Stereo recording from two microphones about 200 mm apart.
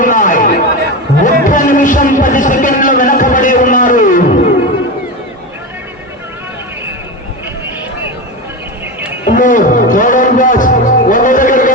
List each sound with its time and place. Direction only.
0.0 s chatter: 40° left (ahead or behind)
1.2 s a sound: 40° left (ahead or behind)
9.3 s music: 40° left (ahead or behind)